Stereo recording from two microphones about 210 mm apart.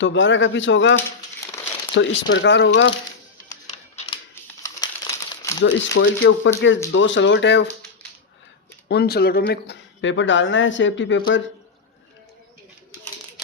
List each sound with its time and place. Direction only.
0.0 s speech: 60° left (ahead or behind)
3.9 s typewriter: 30° left (ahead or behind)
4.6 s crumpling: 15° left (ahead or behind)
5.6 s speech: 60° left (ahead or behind)
8.9 s speech: 50° left (ahead or behind)